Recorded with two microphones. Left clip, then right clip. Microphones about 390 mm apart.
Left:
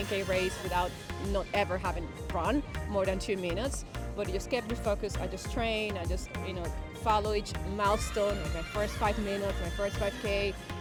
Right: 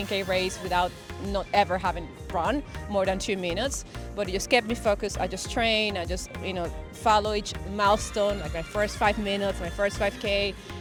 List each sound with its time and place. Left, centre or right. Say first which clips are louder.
0.1 s speech: right 4 dB; right